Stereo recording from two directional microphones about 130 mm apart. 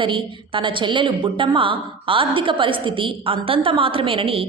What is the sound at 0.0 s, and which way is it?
A woman's voice, 40° right (ahead or behind).